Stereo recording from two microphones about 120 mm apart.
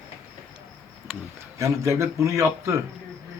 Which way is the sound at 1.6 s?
25° right (ahead or behind).